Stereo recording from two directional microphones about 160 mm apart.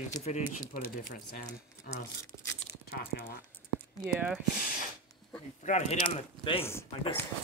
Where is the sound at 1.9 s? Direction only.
65° left (ahead or behind).